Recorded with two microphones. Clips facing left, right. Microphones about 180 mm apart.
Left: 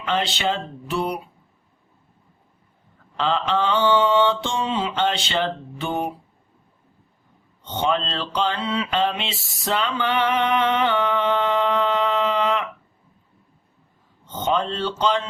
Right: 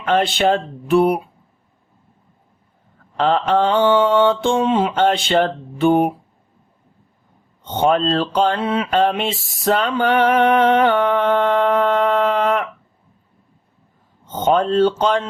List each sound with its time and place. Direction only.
0.0 s mantra: 50° right (ahead or behind)
3.2 s mantra: 50° right (ahead or behind)
7.6 s mantra: 50° right (ahead or behind)
14.3 s mantra: 50° right (ahead or behind)